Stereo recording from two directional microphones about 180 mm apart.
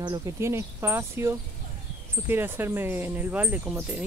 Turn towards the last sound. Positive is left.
turn(degrees=-10)  # may be behind; listen again after turning